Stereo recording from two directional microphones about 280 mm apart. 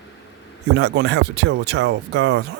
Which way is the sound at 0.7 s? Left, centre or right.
Right.